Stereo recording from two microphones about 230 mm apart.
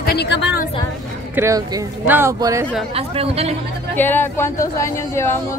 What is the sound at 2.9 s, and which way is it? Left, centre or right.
Speech, right.